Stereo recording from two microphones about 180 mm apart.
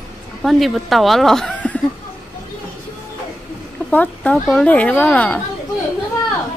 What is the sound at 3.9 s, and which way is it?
Speech, 10° left (ahead or behind).